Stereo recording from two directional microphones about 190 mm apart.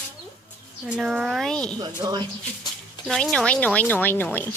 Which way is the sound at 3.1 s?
Centre (ahead or behind).